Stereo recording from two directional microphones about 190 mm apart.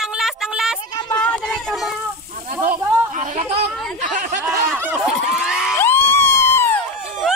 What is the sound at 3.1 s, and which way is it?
Chatter, 40° right (ahead or behind).